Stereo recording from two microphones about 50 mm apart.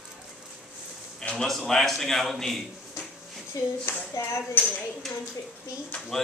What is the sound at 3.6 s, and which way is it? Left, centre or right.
Speech, left.